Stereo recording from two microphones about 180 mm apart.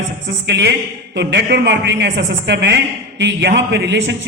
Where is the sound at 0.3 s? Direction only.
65° right (ahead or behind).